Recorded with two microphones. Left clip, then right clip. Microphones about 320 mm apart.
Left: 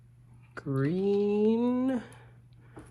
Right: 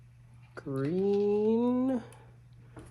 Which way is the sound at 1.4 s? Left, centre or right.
Left.